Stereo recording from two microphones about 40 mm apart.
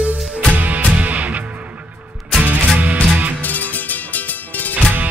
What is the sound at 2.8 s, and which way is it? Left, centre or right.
Music, right.